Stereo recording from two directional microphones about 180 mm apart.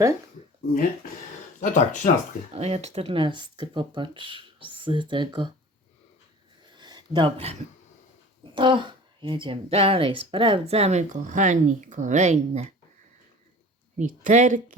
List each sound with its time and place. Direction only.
1.6 s speech: 45° left (ahead or behind)
2.5 s speech: 35° right (ahead or behind)
6.7 s a sound: 25° right (ahead or behind)
8.5 s speech: 25° right (ahead or behind)
13.9 s speech: 45° right (ahead or behind)